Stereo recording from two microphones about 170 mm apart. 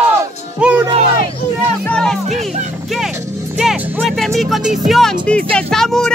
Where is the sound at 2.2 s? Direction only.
40° right (ahead or behind).